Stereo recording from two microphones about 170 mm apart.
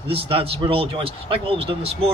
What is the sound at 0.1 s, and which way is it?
Speech, 35° right (ahead or behind).